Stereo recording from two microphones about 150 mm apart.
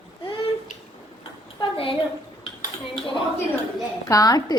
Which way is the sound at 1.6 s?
35° left (ahead or behind).